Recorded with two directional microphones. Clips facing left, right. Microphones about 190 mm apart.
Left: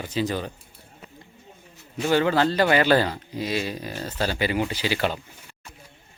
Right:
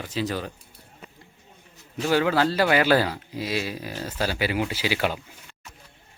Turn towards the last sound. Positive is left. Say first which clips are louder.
# even
turn(degrees=-10)  # may be behind; listen again after turning